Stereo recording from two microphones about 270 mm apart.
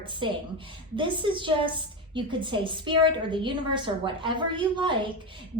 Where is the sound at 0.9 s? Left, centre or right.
Centre.